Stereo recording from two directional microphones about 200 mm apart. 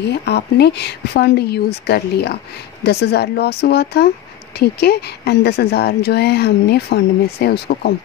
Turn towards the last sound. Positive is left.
turn(degrees=50)  # may be behind; listen again after turning